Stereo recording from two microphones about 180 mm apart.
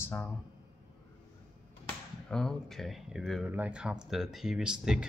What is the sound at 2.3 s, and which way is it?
Speech, 5° left (ahead or behind).